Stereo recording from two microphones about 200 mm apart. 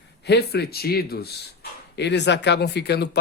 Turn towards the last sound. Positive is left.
turn(degrees=55)  # may be behind; listen again after turning